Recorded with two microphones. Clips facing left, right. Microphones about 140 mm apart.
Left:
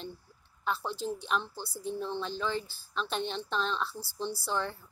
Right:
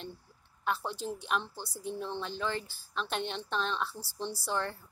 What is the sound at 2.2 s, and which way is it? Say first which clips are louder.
A woman's voice: left 2 dB; 55° right (ahead or behind).